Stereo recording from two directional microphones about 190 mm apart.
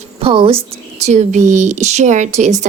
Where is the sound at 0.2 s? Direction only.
30° right (ahead or behind).